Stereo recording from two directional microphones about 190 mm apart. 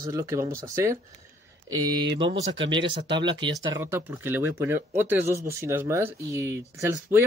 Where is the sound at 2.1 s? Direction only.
25° right (ahead or behind).